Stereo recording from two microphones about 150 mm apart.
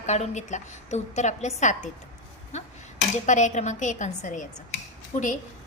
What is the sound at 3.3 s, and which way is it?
A woman's voice, 55° left (ahead or behind).